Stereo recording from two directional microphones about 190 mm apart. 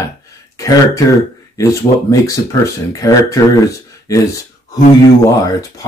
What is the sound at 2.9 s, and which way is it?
Speech, 15° left (ahead or behind).